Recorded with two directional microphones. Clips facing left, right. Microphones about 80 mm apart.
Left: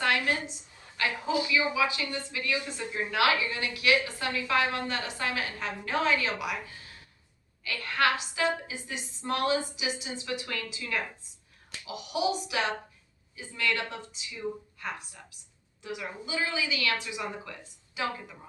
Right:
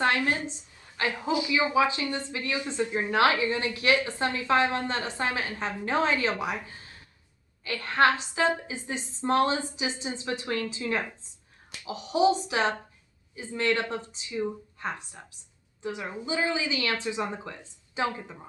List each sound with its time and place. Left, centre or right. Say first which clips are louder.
0.0 s a woman's voice: right 2 dB; right